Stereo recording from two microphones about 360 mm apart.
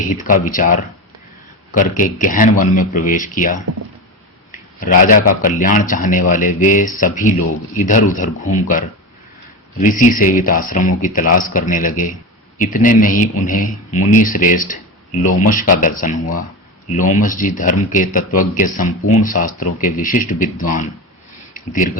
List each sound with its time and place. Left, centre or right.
0.3 s a man's voice: left
9.8 s a man's voice: left
21.5 s a sound: left